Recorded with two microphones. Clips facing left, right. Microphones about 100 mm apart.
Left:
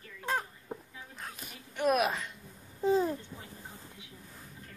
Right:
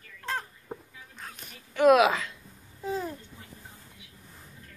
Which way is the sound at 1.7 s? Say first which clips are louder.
Right 8 dB; 90° right.